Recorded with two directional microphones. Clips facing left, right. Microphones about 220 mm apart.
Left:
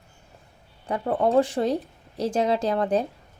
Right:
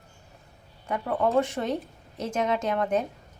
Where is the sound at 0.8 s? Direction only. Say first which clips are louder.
Left 3 dB; 35° left (ahead or behind).